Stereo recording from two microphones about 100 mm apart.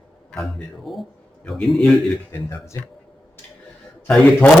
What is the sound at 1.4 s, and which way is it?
Speech, 10° left (ahead or behind).